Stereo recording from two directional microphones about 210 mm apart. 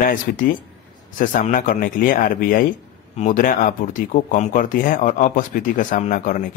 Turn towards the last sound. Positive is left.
turn(degrees=40)  # may be behind; listen again after turning